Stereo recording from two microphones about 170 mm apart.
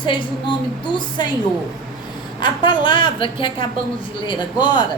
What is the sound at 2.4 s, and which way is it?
A woman's voice, 30° left (ahead or behind).